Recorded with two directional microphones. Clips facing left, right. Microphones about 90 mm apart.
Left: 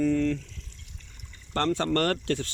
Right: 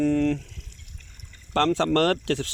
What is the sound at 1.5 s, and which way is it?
Speech, 85° right.